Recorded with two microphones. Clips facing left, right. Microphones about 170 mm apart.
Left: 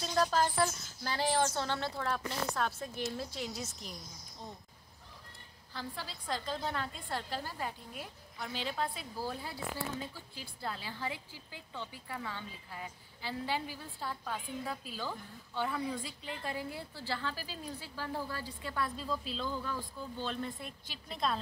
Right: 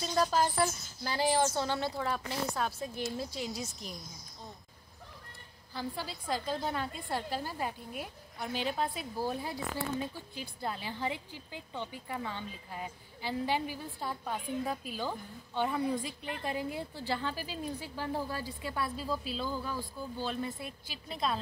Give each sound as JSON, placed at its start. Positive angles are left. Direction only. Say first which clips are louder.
{"t": 0.0, "sound": "speech", "louder": "right 1 dB", "side_deg": -10}
{"t": 5.8, "sound": "a woman's voice", "louder": "right 5 dB", "side_deg": -10}